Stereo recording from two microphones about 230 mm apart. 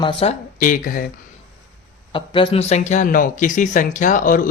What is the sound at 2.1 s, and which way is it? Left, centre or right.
Speech, left.